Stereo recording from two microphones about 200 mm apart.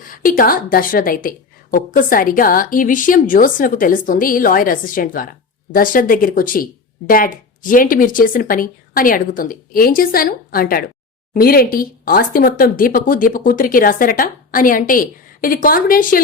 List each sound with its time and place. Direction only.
0.0 s speech: 45° left (ahead or behind)